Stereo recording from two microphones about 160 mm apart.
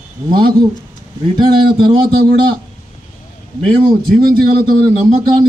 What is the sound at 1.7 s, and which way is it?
Speech, 35° right (ahead or behind).